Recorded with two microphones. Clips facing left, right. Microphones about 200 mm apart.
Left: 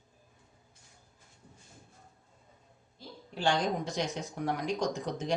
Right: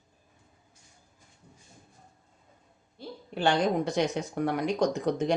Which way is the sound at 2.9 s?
60° right (ahead or behind).